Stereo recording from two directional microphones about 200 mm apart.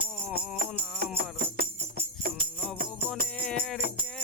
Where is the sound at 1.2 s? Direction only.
50° right (ahead or behind).